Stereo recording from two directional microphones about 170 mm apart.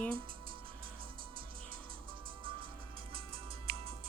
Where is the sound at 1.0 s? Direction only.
60° right (ahead or behind).